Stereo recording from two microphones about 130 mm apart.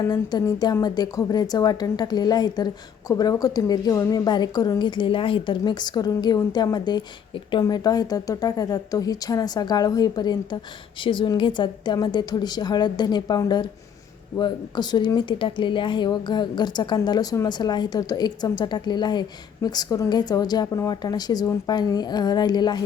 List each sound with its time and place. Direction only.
0.0 s a woman's voice: 30° left (ahead or behind)